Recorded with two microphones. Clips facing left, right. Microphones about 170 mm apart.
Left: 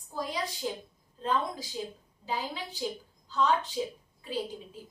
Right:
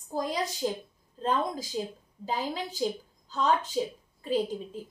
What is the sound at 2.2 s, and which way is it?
Speech, 45° right (ahead or behind).